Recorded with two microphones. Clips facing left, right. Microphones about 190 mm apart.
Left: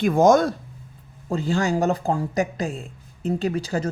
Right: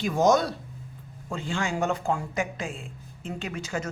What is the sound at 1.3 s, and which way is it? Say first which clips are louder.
Speech: left 8 dB; 40° left (ahead or behind).